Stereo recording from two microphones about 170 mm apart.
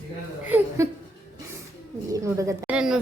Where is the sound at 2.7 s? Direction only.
5° right (ahead or behind).